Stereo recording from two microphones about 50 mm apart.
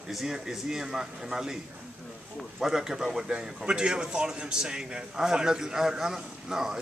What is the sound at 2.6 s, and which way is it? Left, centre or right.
A man's voice, centre.